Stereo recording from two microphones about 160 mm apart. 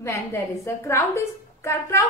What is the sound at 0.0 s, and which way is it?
A woman's voice, 15° left (ahead or behind).